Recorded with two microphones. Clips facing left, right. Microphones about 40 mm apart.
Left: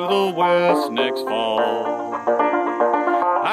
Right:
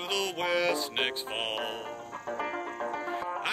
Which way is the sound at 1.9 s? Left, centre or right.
Left.